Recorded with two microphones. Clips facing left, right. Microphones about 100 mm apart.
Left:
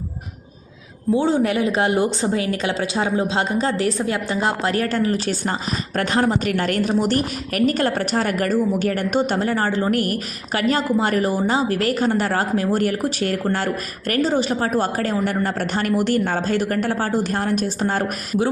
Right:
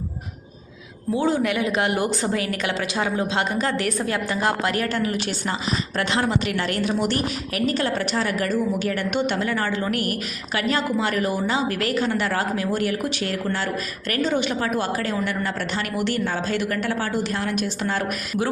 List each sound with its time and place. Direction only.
1.1 s a woman's voice: 30° left (ahead or behind)